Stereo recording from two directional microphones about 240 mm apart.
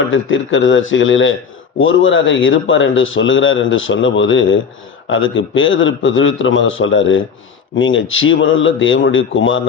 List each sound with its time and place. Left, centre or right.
0.1 s a man's voice: left